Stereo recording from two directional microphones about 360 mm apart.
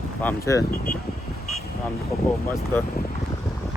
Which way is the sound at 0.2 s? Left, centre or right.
Centre.